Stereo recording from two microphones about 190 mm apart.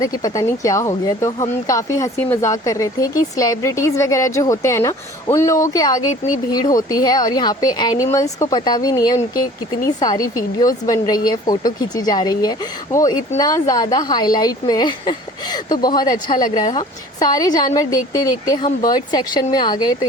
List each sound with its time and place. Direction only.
0.0 s a woman's voice: 20° left (ahead or behind)